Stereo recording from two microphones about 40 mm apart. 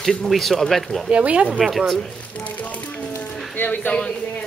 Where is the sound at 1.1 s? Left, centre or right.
Right.